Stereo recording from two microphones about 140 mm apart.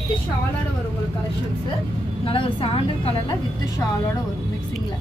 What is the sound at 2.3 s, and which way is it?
A woman's voice, 40° left (ahead or behind).